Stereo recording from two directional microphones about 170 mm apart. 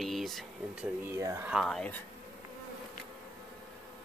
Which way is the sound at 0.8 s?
15° right (ahead or behind).